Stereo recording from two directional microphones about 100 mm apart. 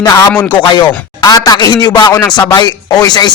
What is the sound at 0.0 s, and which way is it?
Speech, 35° left (ahead or behind).